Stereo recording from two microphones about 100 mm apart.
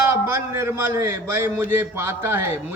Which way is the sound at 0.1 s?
25° right (ahead or behind).